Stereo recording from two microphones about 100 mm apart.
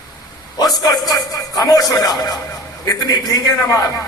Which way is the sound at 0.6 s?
40° left (ahead or behind).